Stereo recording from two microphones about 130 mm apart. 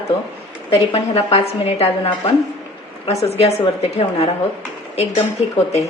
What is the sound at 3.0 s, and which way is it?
A woman's voice, 55° left (ahead or behind).